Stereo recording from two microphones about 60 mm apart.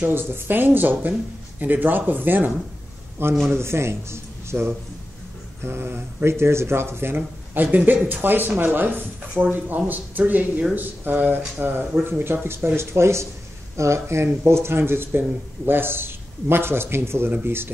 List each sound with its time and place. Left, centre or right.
0.0 s speech: right
7.2 s speech: right